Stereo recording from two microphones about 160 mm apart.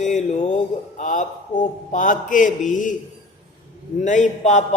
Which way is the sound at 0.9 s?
50° left (ahead or behind).